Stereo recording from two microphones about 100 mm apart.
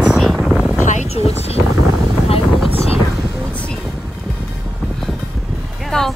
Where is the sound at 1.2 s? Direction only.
90° left.